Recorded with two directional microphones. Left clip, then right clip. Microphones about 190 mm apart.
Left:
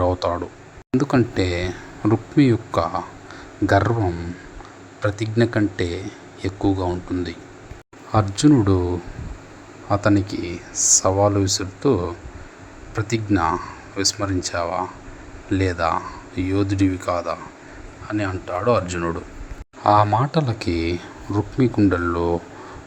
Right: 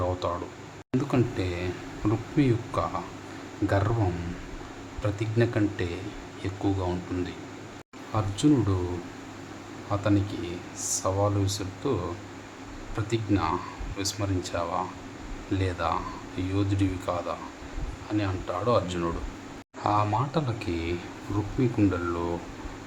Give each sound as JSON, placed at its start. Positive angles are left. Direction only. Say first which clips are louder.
{"t": 0.0, "sound": "a sound", "louder": "left 8 dB", "side_deg": 35}
{"t": 0.9, "sound": "speech", "louder": "left 8 dB", "side_deg": 30}
{"t": 5.0, "sound": "speech", "louder": "left 7 dB", "side_deg": 30}
{"t": 9.9, "sound": "speech", "louder": "left 8 dB", "side_deg": 35}
{"t": 13.0, "sound": "speech", "louder": "left 7 dB", "side_deg": 35}
{"t": 20.1, "sound": "speech", "louder": "left 7 dB", "side_deg": 40}